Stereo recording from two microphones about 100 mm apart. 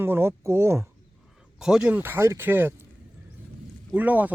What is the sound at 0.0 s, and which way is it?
Speech, 25° right (ahead or behind).